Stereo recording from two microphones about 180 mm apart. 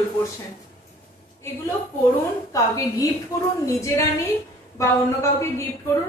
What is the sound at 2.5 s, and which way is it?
Speech, 20° left (ahead or behind).